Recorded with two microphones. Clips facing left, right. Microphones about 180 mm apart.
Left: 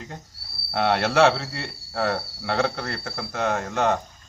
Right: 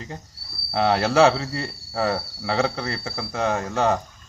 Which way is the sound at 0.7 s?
Centre (ahead or behind).